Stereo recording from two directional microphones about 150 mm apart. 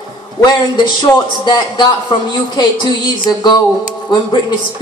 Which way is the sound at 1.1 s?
30° left (ahead or behind).